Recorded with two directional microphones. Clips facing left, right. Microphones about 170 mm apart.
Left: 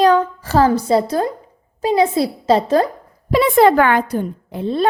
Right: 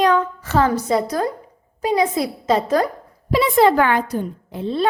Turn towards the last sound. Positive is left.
turn(degrees=50)  # may be behind; listen again after turning